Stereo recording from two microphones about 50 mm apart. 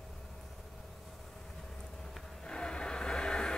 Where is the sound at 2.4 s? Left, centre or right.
Centre.